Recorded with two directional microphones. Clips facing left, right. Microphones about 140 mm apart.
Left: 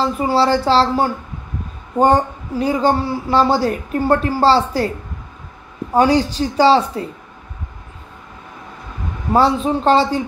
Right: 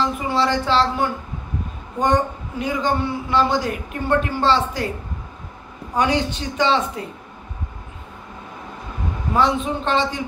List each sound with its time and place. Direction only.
0.0 s speech: 35° left (ahead or behind)
5.9 s speech: 35° left (ahead or behind)
9.3 s speech: 35° left (ahead or behind)